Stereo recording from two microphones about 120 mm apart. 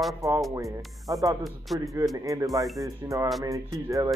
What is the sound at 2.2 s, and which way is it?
Speech, 30° right (ahead or behind).